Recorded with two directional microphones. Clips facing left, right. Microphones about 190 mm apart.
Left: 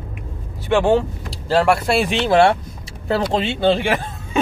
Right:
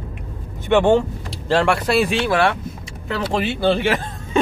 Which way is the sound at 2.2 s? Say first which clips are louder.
Left 4 dB; 25° left (ahead or behind).